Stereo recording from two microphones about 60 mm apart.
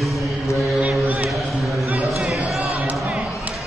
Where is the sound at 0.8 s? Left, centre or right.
Right.